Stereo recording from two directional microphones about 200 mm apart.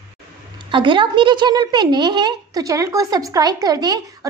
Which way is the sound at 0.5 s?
25° right (ahead or behind).